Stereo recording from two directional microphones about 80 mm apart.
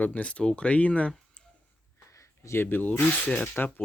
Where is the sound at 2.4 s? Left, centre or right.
Left.